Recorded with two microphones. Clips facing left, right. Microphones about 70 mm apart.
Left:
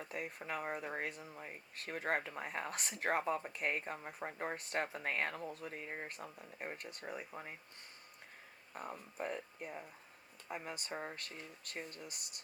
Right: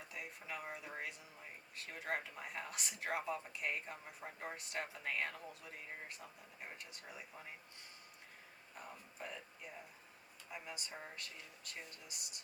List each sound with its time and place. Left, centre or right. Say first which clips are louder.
0.0 s speech: left 6 dB; left
8.7 s speech: left 8 dB; left